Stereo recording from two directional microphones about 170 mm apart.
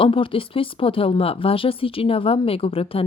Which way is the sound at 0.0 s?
30° left (ahead or behind).